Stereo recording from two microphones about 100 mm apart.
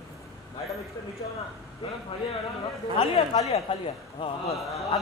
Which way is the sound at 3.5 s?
80° left.